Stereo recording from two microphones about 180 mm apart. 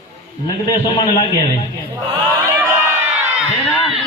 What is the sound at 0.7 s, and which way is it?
Speech, 20° left (ahead or behind).